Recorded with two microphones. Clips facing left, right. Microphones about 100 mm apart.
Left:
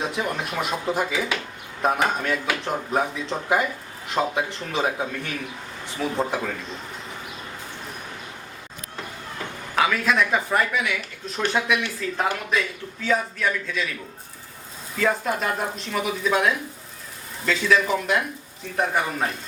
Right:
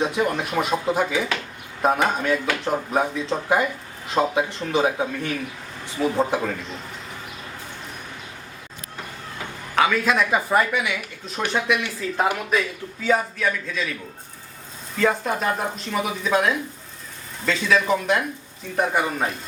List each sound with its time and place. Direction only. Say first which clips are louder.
0.0 s speech: right 4 dB; centre (ahead or behind)
9.7 s speech: right 2 dB; centre (ahead or behind)
11.4 s speech: left 1 dB; 20° right (ahead or behind)
11.7 s speech: right 1 dB; 5° right (ahead or behind)
14.9 s speech: right 2 dB; centre (ahead or behind)